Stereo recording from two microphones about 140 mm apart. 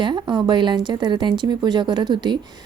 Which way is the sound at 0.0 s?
35° right (ahead or behind).